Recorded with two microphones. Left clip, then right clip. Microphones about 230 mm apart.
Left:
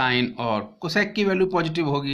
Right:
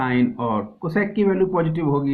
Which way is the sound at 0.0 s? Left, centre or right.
Left.